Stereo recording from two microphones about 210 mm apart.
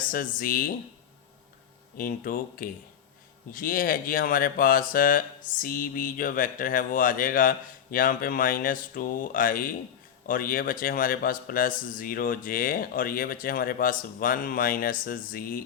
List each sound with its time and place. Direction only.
0.0 s speech: 40° left (ahead or behind)
2.0 s speech: 45° left (ahead or behind)